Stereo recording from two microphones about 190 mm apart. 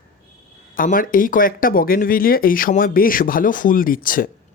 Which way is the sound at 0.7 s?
45° left (ahead or behind).